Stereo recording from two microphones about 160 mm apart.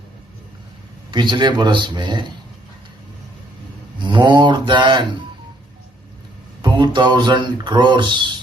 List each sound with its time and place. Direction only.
1.1 s speech: 30° right (ahead or behind)
3.9 s speech: 30° right (ahead or behind)
6.6 s speech: 30° right (ahead or behind)